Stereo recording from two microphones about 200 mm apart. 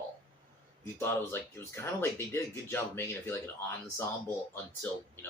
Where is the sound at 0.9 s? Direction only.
10° left (ahead or behind).